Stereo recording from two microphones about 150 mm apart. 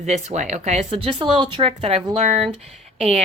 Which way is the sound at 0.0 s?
50° right (ahead or behind).